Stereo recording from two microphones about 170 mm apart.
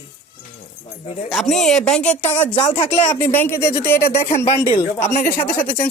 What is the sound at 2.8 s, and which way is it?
Speech, 40° left (ahead or behind).